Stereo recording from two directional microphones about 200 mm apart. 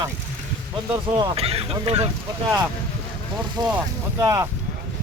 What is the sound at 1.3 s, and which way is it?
Speech, 30° right (ahead or behind).